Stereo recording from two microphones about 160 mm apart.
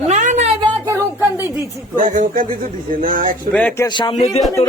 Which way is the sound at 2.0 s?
55° right (ahead or behind).